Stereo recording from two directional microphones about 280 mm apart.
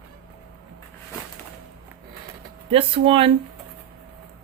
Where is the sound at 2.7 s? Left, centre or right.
Centre.